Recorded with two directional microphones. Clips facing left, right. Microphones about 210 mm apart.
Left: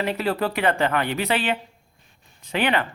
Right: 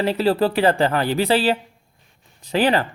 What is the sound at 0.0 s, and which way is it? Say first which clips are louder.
Speech: right 5 dB; 30° right (ahead or behind).